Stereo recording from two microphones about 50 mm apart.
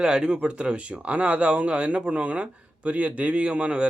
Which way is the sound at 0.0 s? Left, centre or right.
Centre.